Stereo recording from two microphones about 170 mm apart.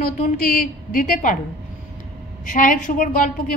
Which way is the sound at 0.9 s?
50° left (ahead or behind).